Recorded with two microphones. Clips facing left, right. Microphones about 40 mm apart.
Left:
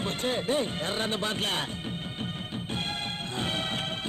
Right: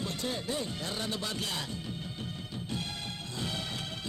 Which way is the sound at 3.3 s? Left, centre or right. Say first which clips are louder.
Left 5 dB; left.